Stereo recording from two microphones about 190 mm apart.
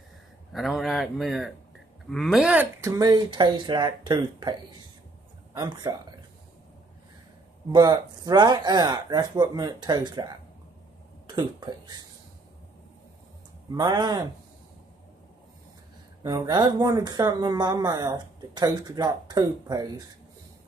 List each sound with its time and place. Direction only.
0.5 s a man's voice: centre (ahead or behind); by 5.9 s 20° right (ahead or behind)
7.7 s speech: 20° right (ahead or behind)
11.2 s speech: 25° right (ahead or behind)
13.7 s speech: 20° right (ahead or behind)
16.2 s speech: 20° right (ahead or behind)